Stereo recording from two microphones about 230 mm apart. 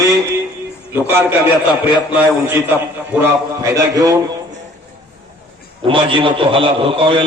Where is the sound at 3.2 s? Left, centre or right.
Centre.